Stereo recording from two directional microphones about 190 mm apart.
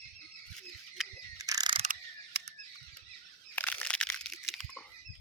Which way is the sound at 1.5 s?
20° right (ahead or behind).